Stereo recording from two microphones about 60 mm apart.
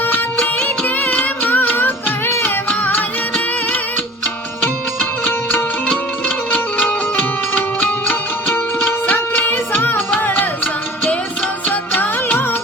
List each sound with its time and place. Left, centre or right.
0.6 s music: left
5.9 s music: left
11.7 s music: left